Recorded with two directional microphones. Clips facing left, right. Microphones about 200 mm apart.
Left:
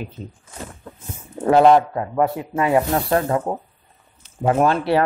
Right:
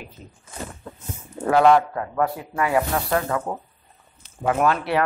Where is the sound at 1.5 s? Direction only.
25° left (ahead or behind).